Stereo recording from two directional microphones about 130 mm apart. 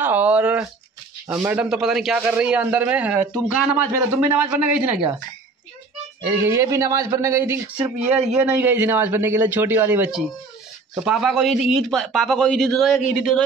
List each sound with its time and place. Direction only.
0.0 s a sound: 10° right (ahead or behind)
1.2 s speech: 20° right (ahead or behind)
1.6 s a man's voice: 5° right (ahead or behind)
6.3 s a man's voice: 20° right (ahead or behind)
11.1 s a man's voice: 5° right (ahead or behind)